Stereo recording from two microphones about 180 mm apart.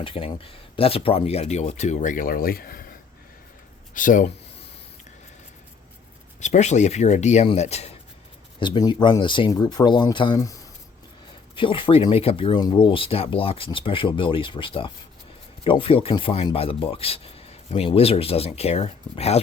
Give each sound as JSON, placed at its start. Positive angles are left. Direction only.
{"t": 0.0, "sound": "speech", "side_deg": 30}
{"t": 3.9, "sound": "speech", "side_deg": 45}
{"t": 6.4, "sound": "speech", "side_deg": 40}
{"t": 8.5, "sound": "speech", "side_deg": 25}